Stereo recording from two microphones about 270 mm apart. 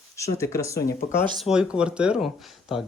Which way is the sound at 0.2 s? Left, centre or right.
Centre.